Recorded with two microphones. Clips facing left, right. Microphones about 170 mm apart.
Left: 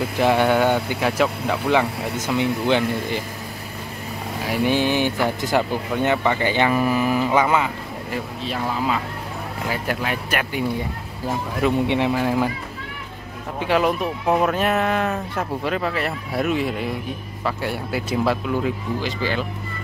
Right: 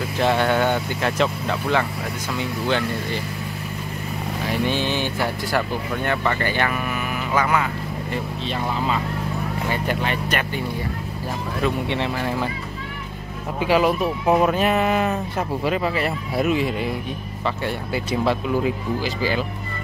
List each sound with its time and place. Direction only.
0.2 s speech: 10° left (ahead or behind)
4.5 s speech: 15° left (ahead or behind)
6.7 s speech: 30° left (ahead or behind)
7.3 s speech: 20° left (ahead or behind)
8.1 s speech: 5° left (ahead or behind)
11.6 s speech: 15° left (ahead or behind)
13.6 s speech: 5° right (ahead or behind)